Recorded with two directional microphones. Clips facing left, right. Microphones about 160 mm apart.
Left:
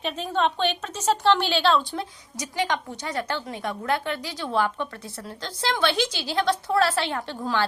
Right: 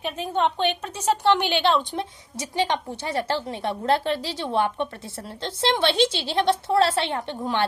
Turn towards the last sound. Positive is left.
turn(degrees=-25)  # may be behind; listen again after turning